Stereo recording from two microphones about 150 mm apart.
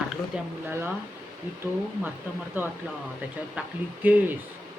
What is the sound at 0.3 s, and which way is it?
Speech, 5° right (ahead or behind).